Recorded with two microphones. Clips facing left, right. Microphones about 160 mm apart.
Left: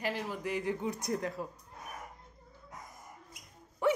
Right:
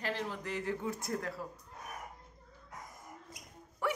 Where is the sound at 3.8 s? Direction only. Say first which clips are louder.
Left 6 dB; 20° left (ahead or behind).